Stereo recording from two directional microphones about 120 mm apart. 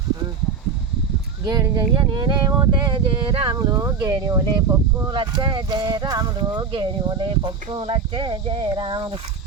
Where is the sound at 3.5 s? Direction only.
30° right (ahead or behind).